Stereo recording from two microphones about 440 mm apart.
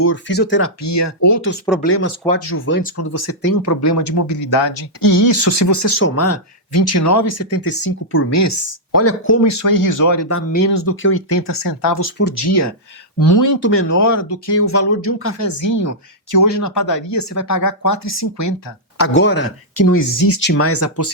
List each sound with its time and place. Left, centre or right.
0.0 s speech: left
1.8 s speech: left
9.5 s speech: left
11.4 s speech: left
11.9 s speech: left
12.5 s speech: left
13.6 s speech: left
15.4 s speech: left
18.9 s speech: left